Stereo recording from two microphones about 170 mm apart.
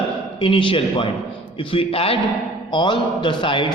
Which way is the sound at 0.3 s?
30° left (ahead or behind).